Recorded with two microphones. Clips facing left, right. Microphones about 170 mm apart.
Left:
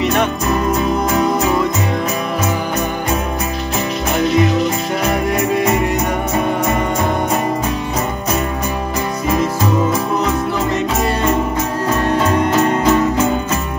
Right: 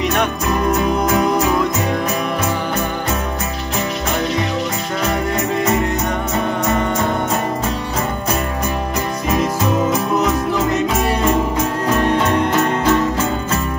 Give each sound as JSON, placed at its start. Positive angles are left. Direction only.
{"t": 0.0, "sound": "music", "side_deg": 5}
{"t": 5.3, "sound": "music", "side_deg": 20}
{"t": 10.1, "sound": "music", "side_deg": 0}
{"t": 12.3, "sound": "music", "side_deg": 10}